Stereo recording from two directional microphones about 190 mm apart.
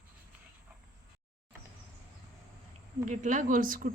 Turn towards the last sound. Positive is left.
turn(degrees=-45)  # may be behind; listen again after turning